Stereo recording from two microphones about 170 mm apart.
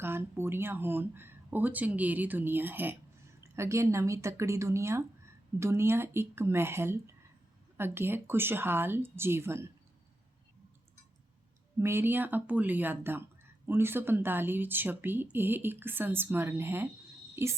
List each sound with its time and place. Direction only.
0.0 s speech: 15° right (ahead or behind)
11.8 s speech: 15° right (ahead or behind)